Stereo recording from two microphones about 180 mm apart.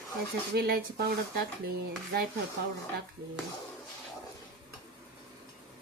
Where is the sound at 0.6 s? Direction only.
55° right (ahead or behind).